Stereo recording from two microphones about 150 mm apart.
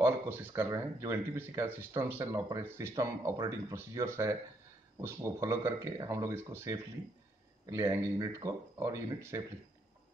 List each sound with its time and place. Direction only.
0.0 s speech: 15° right (ahead or behind)